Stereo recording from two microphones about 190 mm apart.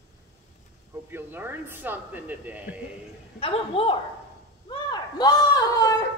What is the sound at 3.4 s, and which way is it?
Speech, 30° left (ahead or behind).